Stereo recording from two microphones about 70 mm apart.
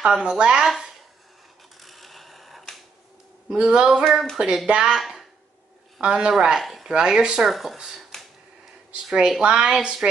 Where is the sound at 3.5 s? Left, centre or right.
Centre.